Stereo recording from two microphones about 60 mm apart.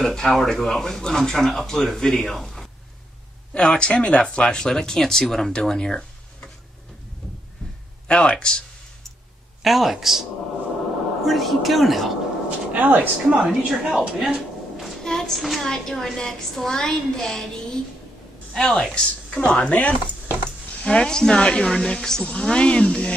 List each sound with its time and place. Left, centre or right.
0.0 s a woman's voice: centre
3.5 s speech: centre
8.1 s speech: centre
9.6 s a woman's voice: centre
11.2 s a woman's voice: centre
12.4 s speech: right
13.7 s a woman's voice: centre